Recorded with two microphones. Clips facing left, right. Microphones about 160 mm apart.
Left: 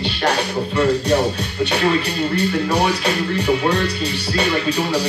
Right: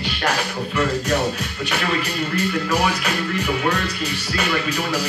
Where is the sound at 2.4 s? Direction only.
35° left (ahead or behind).